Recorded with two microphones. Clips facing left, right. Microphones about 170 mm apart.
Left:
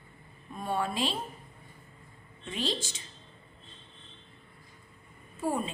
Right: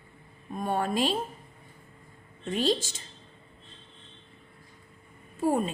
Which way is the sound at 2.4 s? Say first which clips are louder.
Right 7 dB; 45° right (ahead or behind).